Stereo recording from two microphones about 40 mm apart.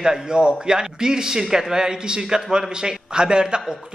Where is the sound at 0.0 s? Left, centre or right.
Centre.